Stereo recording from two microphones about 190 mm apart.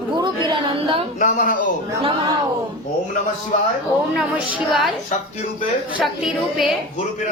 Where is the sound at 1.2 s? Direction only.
45° left (ahead or behind).